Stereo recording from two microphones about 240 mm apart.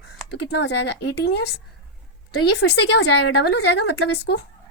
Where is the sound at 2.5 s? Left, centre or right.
Left.